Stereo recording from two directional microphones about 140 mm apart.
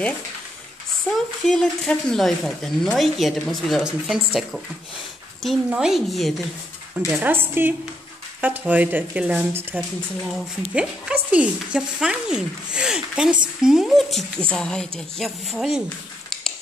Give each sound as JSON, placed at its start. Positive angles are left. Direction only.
{"t": 1.4, "sound": "speech", "side_deg": 5}
{"t": 7.1, "sound": "speech", "side_deg": -15}